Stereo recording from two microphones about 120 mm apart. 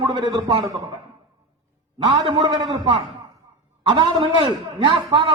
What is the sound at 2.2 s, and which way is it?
A man's voice, 50° right (ahead or behind).